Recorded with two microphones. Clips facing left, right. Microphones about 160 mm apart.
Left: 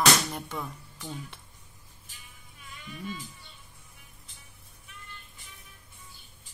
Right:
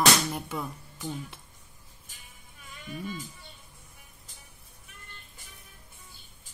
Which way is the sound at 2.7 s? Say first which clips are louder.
Right 2 dB; 45° right (ahead or behind).